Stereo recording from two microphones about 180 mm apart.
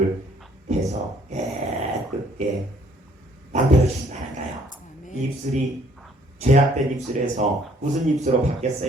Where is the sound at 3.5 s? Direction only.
40° right (ahead or behind).